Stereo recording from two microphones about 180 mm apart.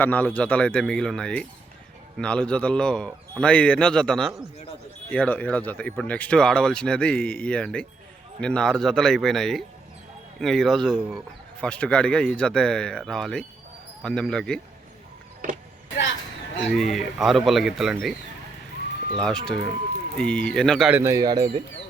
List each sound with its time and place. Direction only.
0.0 s speech: 10° left (ahead or behind)
16.6 s speech: centre (ahead or behind)
19.1 s speech: 5° left (ahead or behind)
20.9 s speech: 15° right (ahead or behind)